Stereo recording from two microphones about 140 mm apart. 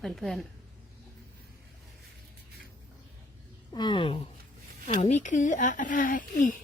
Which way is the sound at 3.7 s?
35° left (ahead or behind).